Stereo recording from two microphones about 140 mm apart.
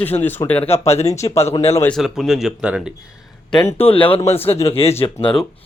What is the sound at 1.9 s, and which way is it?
Speech, centre (ahead or behind).